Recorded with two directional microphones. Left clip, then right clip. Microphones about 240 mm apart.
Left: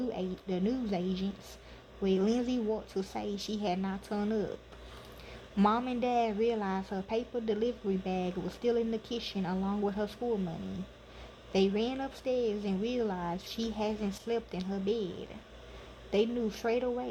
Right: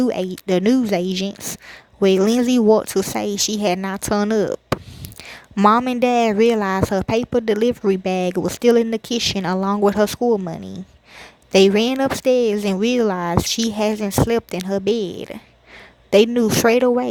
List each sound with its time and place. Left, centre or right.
0.0 s speech: right
5.5 s speech: right
11.5 s speech: right